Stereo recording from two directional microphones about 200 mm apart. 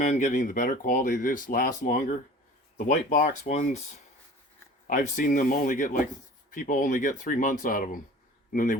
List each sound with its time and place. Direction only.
0.0 s speech: 40° left (ahead or behind)